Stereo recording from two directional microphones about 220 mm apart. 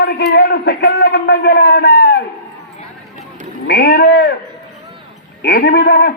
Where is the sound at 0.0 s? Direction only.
50° left (ahead or behind).